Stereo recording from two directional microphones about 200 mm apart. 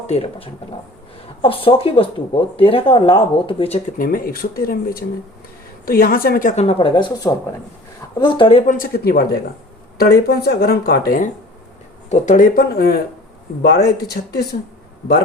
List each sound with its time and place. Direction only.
0.1 s speech: 30° left (ahead or behind); by 6.5 s 45° left (ahead or behind)
6.6 s speech: 30° left (ahead or behind)
8.7 s speech: 45° left (ahead or behind)
12.0 s speech: 35° left (ahead or behind); by 14.4 s 55° left (ahead or behind)